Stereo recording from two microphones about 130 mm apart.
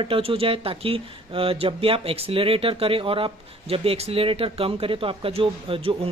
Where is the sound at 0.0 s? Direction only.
45° right (ahead or behind).